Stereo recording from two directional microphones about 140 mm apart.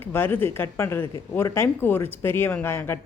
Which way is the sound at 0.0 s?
15° left (ahead or behind).